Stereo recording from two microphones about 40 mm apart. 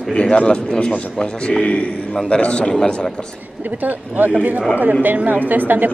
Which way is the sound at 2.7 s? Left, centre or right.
Centre.